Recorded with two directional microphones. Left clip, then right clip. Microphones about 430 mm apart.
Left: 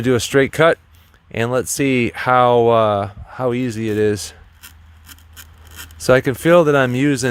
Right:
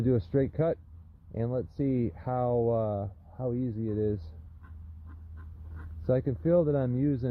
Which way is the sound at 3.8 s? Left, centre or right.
Left.